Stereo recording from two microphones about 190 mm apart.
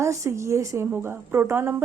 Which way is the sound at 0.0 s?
15° right (ahead or behind).